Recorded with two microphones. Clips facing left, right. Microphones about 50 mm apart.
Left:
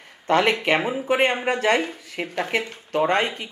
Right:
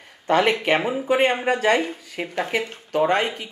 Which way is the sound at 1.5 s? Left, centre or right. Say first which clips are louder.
Right 2 dB; left.